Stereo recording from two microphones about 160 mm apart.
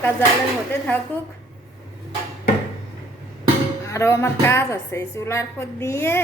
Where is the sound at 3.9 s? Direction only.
20° left (ahead or behind).